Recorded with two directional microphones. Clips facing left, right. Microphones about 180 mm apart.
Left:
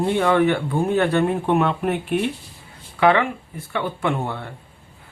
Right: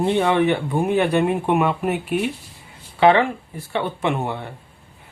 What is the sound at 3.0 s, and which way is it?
Speech, 25° right (ahead or behind).